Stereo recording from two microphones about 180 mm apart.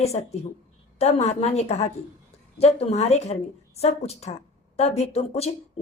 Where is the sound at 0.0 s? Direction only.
35° left (ahead or behind).